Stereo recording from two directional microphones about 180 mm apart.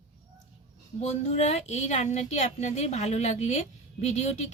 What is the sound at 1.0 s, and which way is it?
Speech, 40° left (ahead or behind).